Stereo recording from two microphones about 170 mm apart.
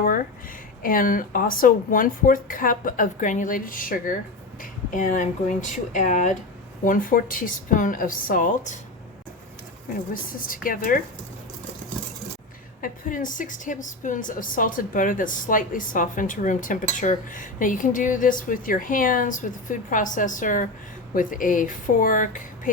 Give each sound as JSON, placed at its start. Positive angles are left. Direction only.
{"t": 0.8, "sound": "a woman's voice", "side_deg": 55}
{"t": 10.4, "sound": "a woman's voice", "side_deg": 55}
{"t": 12.8, "sound": "a woman's voice", "side_deg": 50}